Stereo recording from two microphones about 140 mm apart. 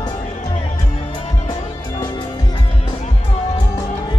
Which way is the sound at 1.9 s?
30° left (ahead or behind).